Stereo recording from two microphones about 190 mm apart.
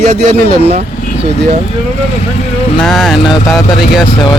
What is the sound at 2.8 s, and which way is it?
Speech, centre (ahead or behind).